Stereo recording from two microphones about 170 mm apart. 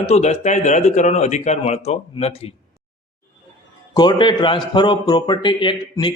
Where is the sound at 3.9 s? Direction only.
25° left (ahead or behind).